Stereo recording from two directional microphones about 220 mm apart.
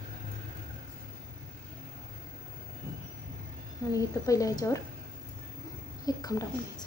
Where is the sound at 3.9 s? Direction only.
15° left (ahead or behind).